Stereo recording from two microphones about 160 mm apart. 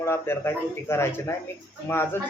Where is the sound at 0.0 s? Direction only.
15° left (ahead or behind).